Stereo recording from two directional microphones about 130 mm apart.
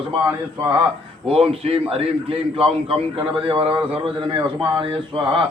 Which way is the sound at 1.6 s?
50° right (ahead or behind).